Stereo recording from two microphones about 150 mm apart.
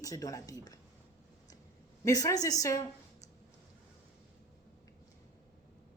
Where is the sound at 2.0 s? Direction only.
25° left (ahead or behind).